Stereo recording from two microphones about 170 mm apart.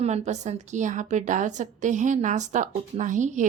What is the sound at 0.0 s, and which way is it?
A woman's voice, 40° right (ahead or behind).